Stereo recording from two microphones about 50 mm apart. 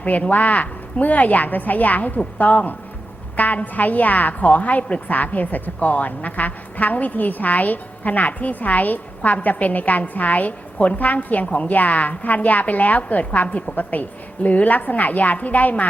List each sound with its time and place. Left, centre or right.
0.0 s a woman's voice: left